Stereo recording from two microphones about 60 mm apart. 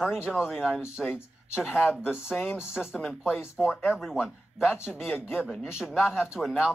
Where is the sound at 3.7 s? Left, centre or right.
Left.